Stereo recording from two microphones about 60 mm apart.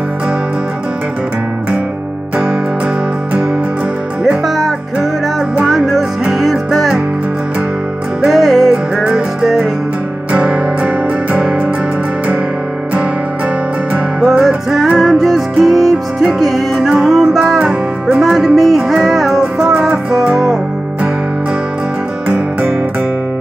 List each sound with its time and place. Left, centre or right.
4.2 s music: centre
8.3 s music: centre
13.9 s music: centre
19.4 s music: centre